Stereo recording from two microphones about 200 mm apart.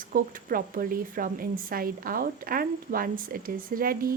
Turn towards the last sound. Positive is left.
turn(degrees=-45)  # may be behind; listen again after turning